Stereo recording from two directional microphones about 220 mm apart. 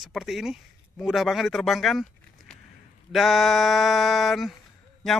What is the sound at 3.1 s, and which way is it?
Speech, centre (ahead or behind).